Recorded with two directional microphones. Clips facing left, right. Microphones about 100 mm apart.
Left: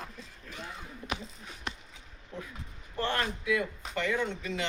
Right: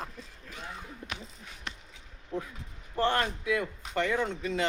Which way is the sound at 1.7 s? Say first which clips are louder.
Left 3 dB; 15° left (ahead or behind).